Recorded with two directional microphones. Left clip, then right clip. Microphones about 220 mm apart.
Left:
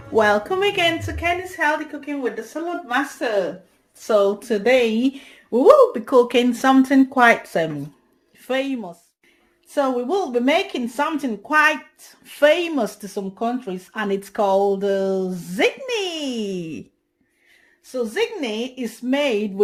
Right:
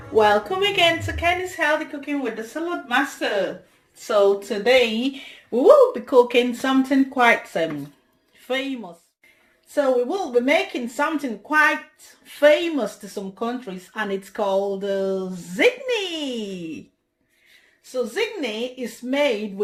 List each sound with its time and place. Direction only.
0.1 s speech: 50° left (ahead or behind)
2.0 s speech: 30° left (ahead or behind)
4.0 s a woman's voice: 40° left (ahead or behind)
17.9 s speech: 50° left (ahead or behind)